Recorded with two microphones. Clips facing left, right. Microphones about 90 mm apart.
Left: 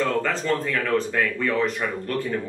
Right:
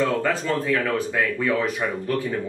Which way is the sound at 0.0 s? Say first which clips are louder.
Right 1 dB; 5° right (ahead or behind).